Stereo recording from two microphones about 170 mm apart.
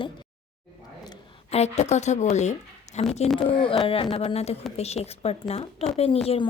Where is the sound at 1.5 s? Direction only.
40° left (ahead or behind).